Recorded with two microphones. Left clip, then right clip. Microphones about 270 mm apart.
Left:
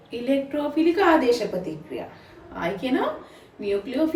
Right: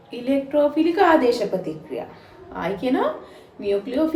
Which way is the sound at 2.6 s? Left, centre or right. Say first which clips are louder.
Right 3 dB; centre.